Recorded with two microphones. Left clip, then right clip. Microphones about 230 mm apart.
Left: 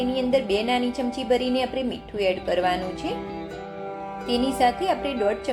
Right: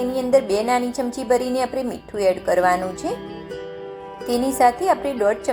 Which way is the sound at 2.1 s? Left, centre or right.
Right.